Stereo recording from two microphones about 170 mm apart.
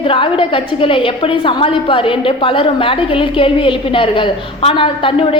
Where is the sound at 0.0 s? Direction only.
30° left (ahead or behind).